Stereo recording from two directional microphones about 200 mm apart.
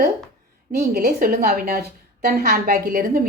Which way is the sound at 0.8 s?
50° right (ahead or behind).